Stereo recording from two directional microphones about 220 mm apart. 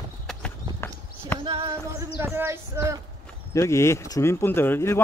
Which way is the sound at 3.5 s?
15° left (ahead or behind).